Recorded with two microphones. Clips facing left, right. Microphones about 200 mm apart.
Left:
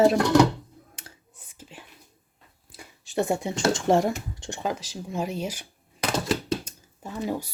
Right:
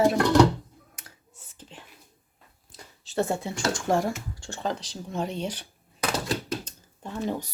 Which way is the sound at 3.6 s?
25° left (ahead or behind).